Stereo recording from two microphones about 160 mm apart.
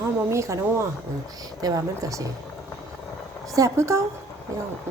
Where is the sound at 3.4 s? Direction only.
20° right (ahead or behind).